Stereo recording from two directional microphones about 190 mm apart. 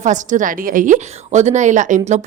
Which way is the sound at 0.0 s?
40° right (ahead or behind).